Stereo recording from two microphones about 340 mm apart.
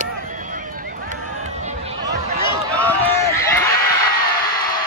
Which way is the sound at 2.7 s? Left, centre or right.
Centre.